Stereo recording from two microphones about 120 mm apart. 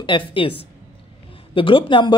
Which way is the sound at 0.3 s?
45° left (ahead or behind).